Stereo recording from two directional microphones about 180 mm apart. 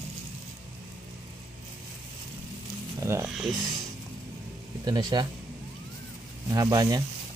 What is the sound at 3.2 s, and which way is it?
Speech, centre (ahead or behind).